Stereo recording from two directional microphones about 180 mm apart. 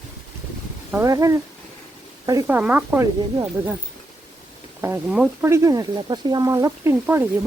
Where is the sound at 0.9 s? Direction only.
15° right (ahead or behind).